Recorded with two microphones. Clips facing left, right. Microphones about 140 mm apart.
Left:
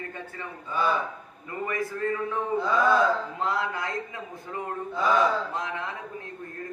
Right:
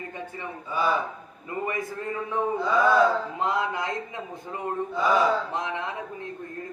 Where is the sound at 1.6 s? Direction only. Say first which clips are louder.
Left 3 dB; 20° right (ahead or behind).